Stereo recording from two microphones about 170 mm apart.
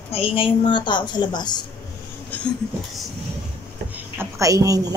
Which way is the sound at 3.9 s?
10° right (ahead or behind).